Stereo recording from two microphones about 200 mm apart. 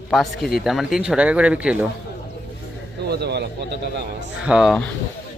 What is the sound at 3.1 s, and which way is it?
Speech, 55° right (ahead or behind).